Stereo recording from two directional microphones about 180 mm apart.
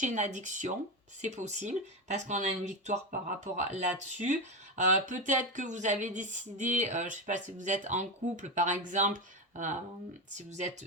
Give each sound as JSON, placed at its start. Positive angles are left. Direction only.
{"t": 0.0, "sound": "speech", "side_deg": -40}
{"t": 4.8, "sound": "speech", "side_deg": -45}